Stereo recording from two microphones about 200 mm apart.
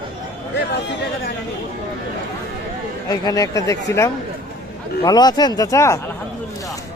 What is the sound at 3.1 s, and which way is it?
Speech, 15° left (ahead or behind).